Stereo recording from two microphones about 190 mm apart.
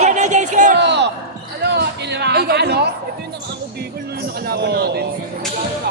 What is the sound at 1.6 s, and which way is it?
Music, 60° right (ahead or behind).